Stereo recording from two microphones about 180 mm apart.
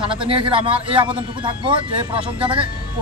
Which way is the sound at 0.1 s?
30° right (ahead or behind).